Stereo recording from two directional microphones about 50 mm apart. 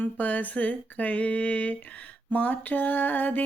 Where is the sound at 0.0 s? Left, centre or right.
Left.